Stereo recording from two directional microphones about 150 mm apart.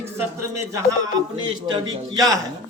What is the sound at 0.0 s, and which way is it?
A man's voice, 20° right (ahead or behind).